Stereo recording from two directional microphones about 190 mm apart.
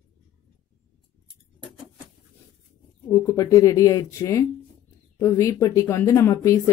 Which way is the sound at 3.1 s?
15° left (ahead or behind).